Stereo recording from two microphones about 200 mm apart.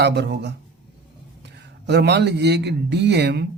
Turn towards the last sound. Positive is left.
turn(degrees=-55)  # may be behind; listen again after turning